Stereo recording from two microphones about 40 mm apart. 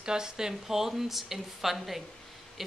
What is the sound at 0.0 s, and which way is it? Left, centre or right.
Speech, centre.